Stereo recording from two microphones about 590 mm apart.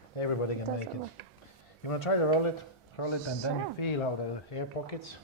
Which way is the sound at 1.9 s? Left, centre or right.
Left.